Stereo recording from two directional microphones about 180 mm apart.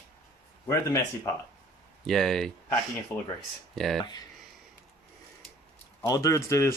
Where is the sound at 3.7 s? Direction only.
Centre (ahead or behind).